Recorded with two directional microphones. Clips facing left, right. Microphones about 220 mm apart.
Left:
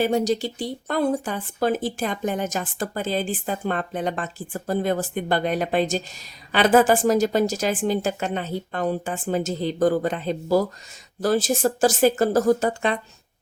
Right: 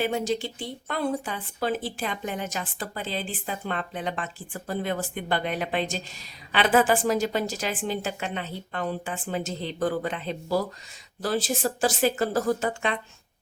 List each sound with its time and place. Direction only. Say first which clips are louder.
0.0 s speech: left 5 dB; 40° left (ahead or behind)